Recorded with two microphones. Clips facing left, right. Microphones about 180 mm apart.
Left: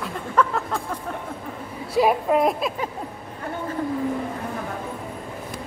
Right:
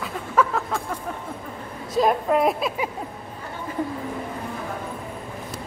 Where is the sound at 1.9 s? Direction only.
10° left (ahead or behind).